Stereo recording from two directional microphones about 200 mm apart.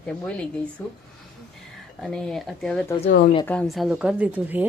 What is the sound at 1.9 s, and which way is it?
Speech, 5° left (ahead or behind).